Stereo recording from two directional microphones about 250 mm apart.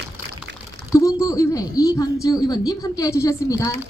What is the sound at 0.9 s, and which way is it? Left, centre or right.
Speech, centre.